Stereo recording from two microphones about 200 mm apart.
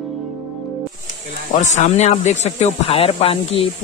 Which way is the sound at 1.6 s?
35° left (ahead or behind).